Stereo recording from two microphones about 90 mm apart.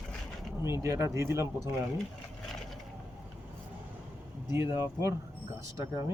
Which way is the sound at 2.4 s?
5° left (ahead or behind).